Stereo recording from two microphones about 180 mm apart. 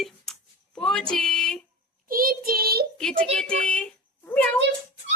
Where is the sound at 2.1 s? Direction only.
55° right (ahead or behind).